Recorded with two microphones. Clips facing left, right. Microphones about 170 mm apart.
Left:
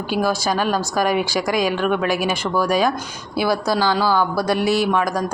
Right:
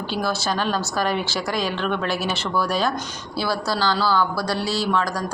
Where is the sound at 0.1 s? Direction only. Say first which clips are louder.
Left 5 dB; 10° left (ahead or behind).